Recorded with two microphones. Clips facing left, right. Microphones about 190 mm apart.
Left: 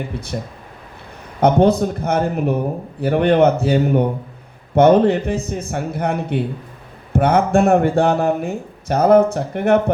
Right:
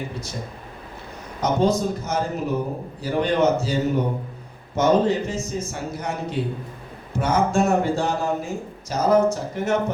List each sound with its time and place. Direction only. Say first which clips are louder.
0.3 s a man's voice: left 6 dB; 60° left (ahead or behind)